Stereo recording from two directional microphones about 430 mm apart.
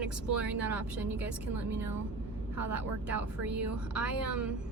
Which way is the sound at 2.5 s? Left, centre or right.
Right.